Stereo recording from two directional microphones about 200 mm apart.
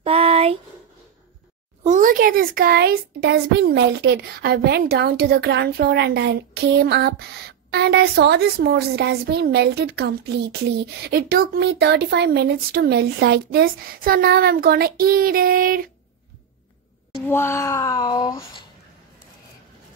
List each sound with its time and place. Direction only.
0.0 s a sound: 30° right (ahead or behind)
1.8 s a woman's voice: 40° right (ahead or behind)
17.3 s speech: 10° left (ahead or behind)